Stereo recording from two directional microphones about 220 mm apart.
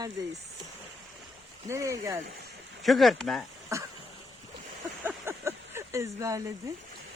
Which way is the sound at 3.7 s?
15° right (ahead or behind).